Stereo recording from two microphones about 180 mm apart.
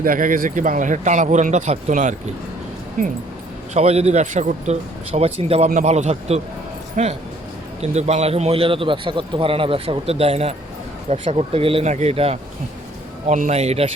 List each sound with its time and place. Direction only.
0.0 s speech: 50° right (ahead or behind)
3.8 s a man's voice: 35° right (ahead or behind)